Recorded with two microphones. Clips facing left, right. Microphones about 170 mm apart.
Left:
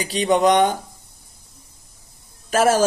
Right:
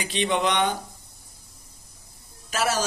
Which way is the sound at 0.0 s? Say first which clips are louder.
Left 7 dB; 40° left (ahead or behind).